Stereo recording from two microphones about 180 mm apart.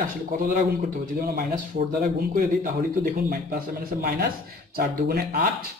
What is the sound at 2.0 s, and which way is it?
Speech, 55° right (ahead or behind).